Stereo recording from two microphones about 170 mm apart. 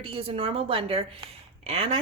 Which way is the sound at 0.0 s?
30° right (ahead or behind).